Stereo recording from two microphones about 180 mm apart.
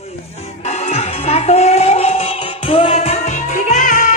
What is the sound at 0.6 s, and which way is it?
Music, 40° left (ahead or behind).